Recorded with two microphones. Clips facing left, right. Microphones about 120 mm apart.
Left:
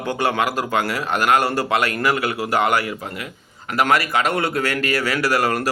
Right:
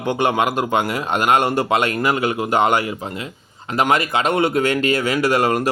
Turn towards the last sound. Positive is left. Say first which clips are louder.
# right 3 dB
turn(degrees=-20)  # may be behind; listen again after turning